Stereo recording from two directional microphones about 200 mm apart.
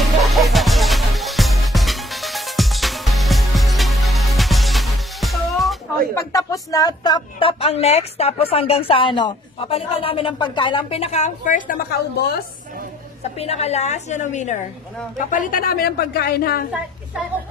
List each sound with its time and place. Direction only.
0.0 s music: centre (ahead or behind)
6.1 s speech: 15° left (ahead or behind); by 12.4 s 50° left (ahead or behind)
13.4 s a woman's voice: 30° left (ahead or behind); by 16.6 s 50° left (ahead or behind)